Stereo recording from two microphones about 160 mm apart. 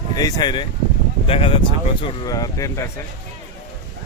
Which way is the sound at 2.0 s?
25° left (ahead or behind).